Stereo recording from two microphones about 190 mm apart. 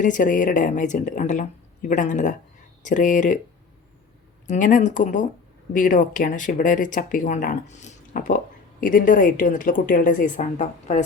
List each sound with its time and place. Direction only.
0.0 s a woman's voice: 45° left (ahead or behind)
4.4 s a woman's voice: 40° left (ahead or behind)